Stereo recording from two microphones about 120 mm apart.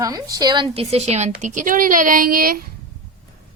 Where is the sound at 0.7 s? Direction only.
65° right (ahead or behind); by 2.1 s 90° right.